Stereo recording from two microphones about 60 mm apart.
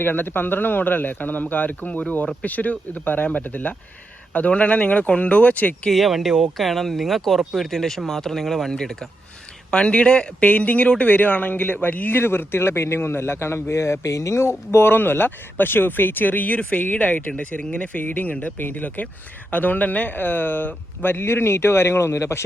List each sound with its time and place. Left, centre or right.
0.0 s a man's voice: left
5.9 s speech: centre; by 12.2 s left
12.2 s a man's voice: left